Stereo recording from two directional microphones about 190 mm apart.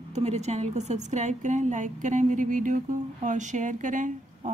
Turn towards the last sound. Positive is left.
turn(degrees=-40)  # may be behind; listen again after turning